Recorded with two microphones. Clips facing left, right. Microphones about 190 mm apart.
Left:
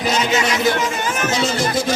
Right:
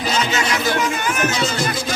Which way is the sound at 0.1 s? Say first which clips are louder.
Left 2 dB; 20° left (ahead or behind).